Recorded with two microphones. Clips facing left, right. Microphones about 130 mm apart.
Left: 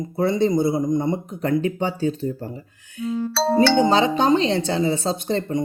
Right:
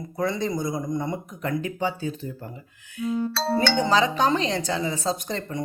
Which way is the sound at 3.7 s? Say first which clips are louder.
Left 4 dB; 25° left (ahead or behind).